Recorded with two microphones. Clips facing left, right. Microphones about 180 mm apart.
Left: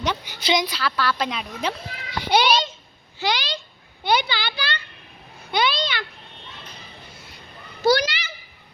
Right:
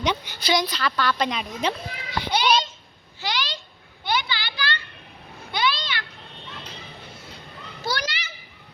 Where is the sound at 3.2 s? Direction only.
75° left (ahead or behind).